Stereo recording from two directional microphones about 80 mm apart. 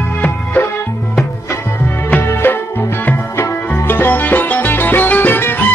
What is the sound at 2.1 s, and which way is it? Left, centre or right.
Music, left.